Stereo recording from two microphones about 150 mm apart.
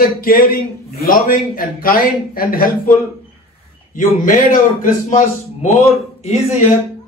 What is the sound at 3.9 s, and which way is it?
A man's voice, 65° left (ahead or behind).